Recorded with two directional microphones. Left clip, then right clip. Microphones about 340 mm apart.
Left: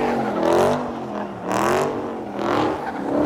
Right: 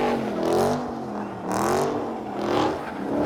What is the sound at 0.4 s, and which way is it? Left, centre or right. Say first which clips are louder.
Vehicle: left 5 dB; centre.